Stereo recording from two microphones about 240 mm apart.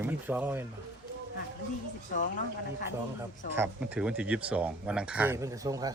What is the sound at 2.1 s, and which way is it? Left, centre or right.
Speech, left.